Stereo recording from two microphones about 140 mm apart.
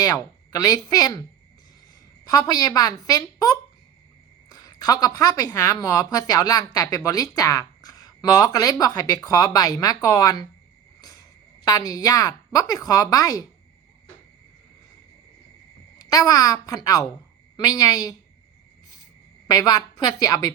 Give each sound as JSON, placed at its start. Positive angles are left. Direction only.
{"t": 0.0, "sound": "speech", "side_deg": 25}
{"t": 2.2, "sound": "speech", "side_deg": 30}
{"t": 11.6, "sound": "speech", "side_deg": 25}
{"t": 16.0, "sound": "speech", "side_deg": 25}
{"t": 19.5, "sound": "speech", "side_deg": 30}